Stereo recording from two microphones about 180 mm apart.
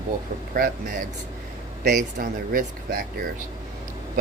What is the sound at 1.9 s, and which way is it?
Speech, 50° right (ahead or behind).